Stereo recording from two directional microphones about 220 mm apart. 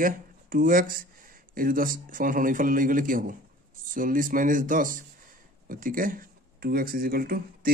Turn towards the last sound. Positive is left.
turn(degrees=-40)  # may be behind; listen again after turning